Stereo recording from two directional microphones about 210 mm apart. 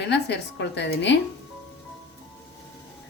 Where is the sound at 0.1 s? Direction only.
55° left (ahead or behind).